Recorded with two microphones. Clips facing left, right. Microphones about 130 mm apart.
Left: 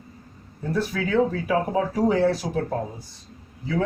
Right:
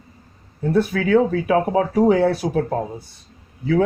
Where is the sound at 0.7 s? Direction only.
60° right (ahead or behind).